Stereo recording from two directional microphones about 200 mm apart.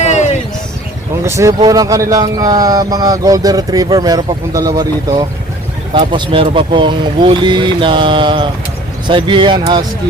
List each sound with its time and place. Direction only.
0.0 s a sound: 35° left (ahead or behind)
1.2 s speech: 15° right (ahead or behind)
5.9 s speech: 25° right (ahead or behind)